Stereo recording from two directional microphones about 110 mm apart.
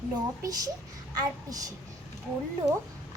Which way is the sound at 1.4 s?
35° right (ahead or behind).